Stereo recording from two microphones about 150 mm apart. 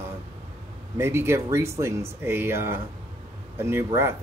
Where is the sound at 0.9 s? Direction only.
15° right (ahead or behind).